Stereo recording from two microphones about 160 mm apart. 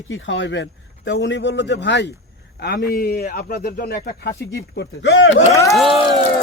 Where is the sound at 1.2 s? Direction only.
90° left.